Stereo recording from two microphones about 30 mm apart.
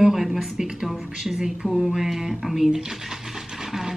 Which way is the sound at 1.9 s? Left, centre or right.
Centre.